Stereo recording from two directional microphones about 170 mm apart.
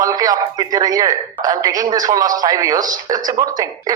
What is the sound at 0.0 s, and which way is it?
Speech, 20° right (ahead or behind).